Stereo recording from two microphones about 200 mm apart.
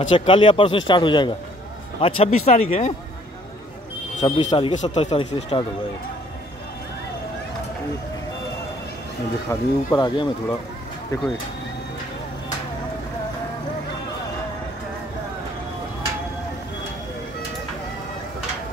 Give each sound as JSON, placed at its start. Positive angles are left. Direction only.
{"t": 0.0, "sound": "speech", "side_deg": 35}
{"t": 4.2, "sound": "speech", "side_deg": 25}
{"t": 9.5, "sound": "speech", "side_deg": 20}